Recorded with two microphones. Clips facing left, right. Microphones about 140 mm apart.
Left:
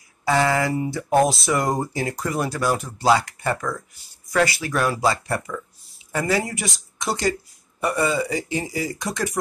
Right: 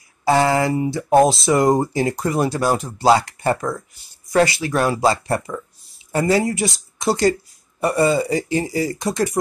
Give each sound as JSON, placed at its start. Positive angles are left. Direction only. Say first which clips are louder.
{"t": 0.2, "sound": "speech", "louder": "right 4 dB", "side_deg": -30}